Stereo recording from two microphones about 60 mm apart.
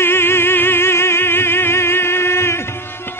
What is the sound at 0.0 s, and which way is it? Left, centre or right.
Music, left.